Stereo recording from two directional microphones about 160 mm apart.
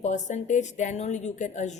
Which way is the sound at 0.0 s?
50° left (ahead or behind).